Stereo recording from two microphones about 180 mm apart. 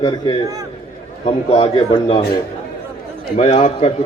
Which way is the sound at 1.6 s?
25° left (ahead or behind).